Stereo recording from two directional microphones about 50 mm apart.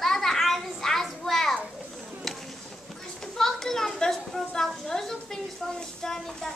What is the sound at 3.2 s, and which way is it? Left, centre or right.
A child's voice, centre.